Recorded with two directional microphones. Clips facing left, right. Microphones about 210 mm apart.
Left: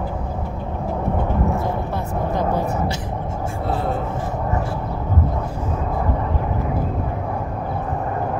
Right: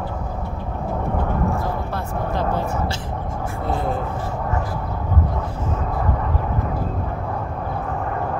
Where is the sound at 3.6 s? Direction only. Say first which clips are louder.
Even; centre (ahead or behind).